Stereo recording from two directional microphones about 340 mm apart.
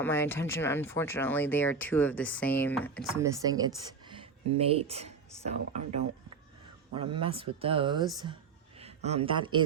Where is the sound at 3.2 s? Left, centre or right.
Centre.